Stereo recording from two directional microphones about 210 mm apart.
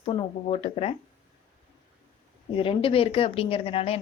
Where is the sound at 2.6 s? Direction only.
25° left (ahead or behind).